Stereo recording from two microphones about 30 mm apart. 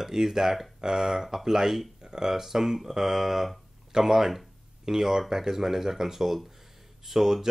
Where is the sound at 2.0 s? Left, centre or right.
Right.